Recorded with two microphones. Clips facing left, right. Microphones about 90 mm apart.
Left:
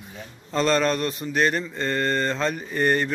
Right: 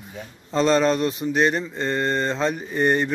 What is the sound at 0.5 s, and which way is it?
A man's voice, 20° right (ahead or behind).